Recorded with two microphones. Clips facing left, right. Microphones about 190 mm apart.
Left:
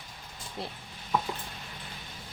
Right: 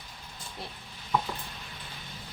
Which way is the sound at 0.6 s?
25° left (ahead or behind).